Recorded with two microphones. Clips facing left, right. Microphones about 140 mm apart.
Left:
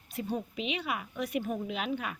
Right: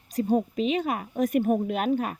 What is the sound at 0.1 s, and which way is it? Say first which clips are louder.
Speech: right 10 dB; 40° right (ahead or behind).